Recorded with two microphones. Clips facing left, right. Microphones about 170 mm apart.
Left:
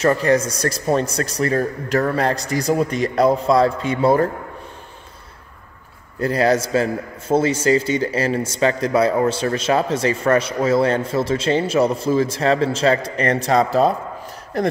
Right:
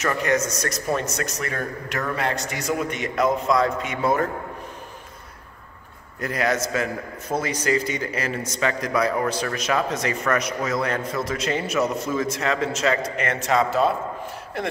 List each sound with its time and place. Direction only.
0.0 s a man's voice: 30° left (ahead or behind)
6.1 s a man's voice: 30° left (ahead or behind)